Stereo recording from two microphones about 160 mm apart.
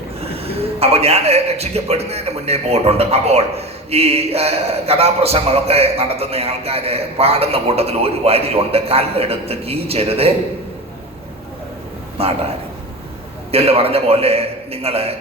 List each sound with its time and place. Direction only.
0.2 s a man's voice: 40° right (ahead or behind)
12.1 s a man's voice: 40° right (ahead or behind)
13.5 s a man's voice: 40° right (ahead or behind)